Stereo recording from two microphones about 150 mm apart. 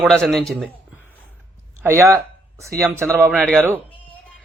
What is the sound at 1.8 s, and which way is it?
Speech, 15° right (ahead or behind).